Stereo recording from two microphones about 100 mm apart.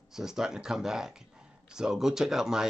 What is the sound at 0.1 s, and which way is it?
Speech, 5° right (ahead or behind).